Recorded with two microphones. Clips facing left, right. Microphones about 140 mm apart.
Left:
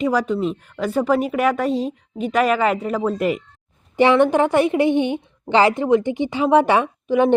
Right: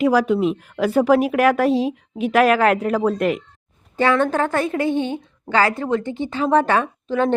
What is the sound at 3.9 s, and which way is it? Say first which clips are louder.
A woman's voice: left 4 dB; 20° left (ahead or behind).